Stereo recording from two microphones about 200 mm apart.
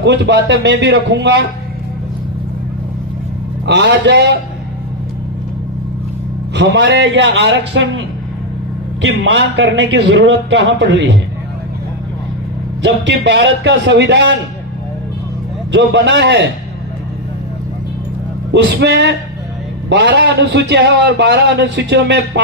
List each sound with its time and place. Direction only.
0.0 s a man's voice: 60° right (ahead or behind)
3.6 s a man's voice: 60° right (ahead or behind)
6.5 s a man's voice: 65° right (ahead or behind)
9.0 s a man's voice: 65° right (ahead or behind)
12.8 s a man's voice: 60° right (ahead or behind)
15.7 s a man's voice: 60° right (ahead or behind)
18.5 s a man's voice: 60° right (ahead or behind)